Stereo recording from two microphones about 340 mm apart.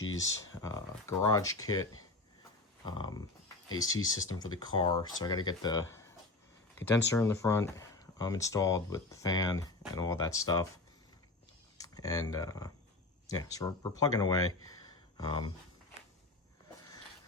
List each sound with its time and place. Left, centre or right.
0.0 s a sound: left
0.6 s speech: centre
2.8 s speech: centre
11.8 s speech: centre